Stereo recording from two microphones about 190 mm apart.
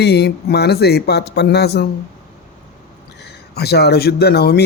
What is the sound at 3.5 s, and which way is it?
Speech, 55° left (ahead or behind).